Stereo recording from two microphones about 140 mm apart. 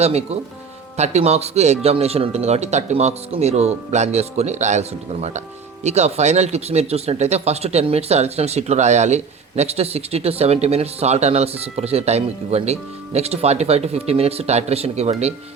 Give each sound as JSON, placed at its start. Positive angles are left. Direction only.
{"t": 0.0, "sound": "speech", "side_deg": -50}